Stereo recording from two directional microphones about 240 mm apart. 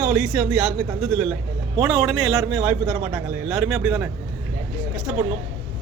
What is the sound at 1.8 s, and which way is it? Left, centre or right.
A man's voice, centre.